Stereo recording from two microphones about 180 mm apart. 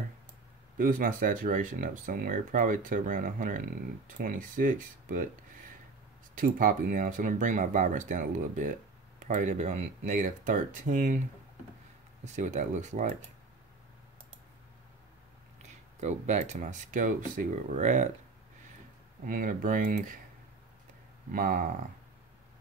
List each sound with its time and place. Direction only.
0.7 s speech: 50° right (ahead or behind)
6.3 s speech: 50° right (ahead or behind)
12.4 s speech: 45° right (ahead or behind)
16.0 s speech: 40° right (ahead or behind)
19.2 s speech: 50° right (ahead or behind)
21.3 s speech: 50° right (ahead or behind)